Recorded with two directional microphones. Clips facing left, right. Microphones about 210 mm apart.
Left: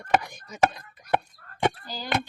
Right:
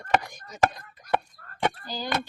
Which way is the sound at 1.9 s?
15° right (ahead or behind).